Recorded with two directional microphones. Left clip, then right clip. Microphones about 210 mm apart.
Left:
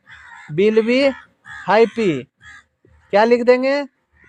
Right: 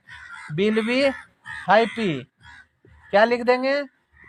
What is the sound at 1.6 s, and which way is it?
A man's voice, 60° left (ahead or behind).